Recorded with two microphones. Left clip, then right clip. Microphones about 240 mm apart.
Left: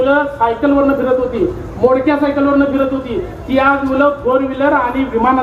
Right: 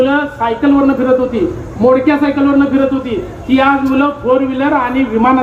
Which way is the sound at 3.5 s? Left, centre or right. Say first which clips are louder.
Right 1 dB; right.